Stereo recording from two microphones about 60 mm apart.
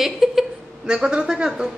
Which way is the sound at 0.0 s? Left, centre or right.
Centre.